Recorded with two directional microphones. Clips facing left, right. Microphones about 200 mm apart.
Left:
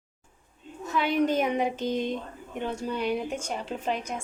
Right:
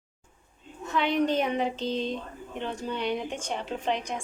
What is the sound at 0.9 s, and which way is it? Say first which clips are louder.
A woman's voice: left 1 dB; 5° left (ahead or behind).